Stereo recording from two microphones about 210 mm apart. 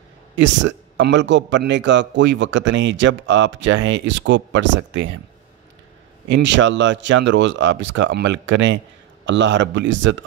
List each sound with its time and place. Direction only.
0.4 s speech: 60° right (ahead or behind)
6.2 s speech: 60° right (ahead or behind)